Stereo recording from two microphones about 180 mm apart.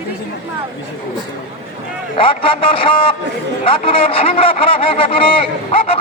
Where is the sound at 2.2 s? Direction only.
30° left (ahead or behind).